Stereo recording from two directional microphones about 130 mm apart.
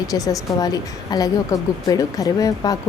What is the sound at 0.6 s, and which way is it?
A woman's voice, 30° left (ahead or behind).